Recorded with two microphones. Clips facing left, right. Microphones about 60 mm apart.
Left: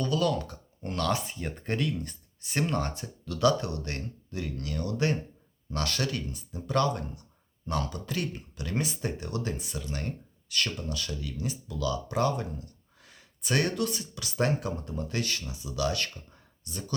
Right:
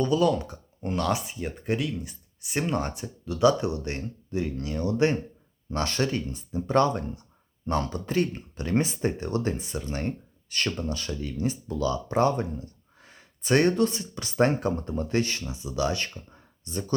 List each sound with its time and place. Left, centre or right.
0.0 s speech: right